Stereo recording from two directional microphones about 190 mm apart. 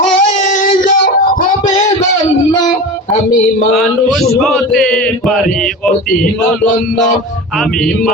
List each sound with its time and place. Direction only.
0.0 s music: 40° left (ahead or behind)
3.7 s a man's voice: centre (ahead or behind)